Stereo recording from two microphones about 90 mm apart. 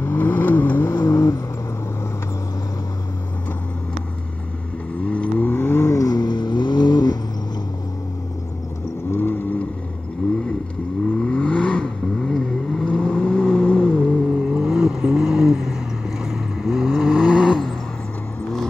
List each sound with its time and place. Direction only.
0.0 s vehicle: 20° left (ahead or behind)
0.9 s vehicle: 35° left (ahead or behind)
5.0 s vehicle: 15° left (ahead or behind)
6.0 s vehicle: 50° left (ahead or behind)
9.1 s vehicle: 25° left (ahead or behind)
11.1 s vehicle: 10° left (ahead or behind)
14.5 s vehicle: 10° right (ahead or behind)